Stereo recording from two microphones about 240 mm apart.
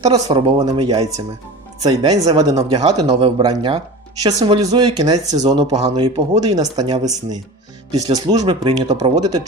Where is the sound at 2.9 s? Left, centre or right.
Centre.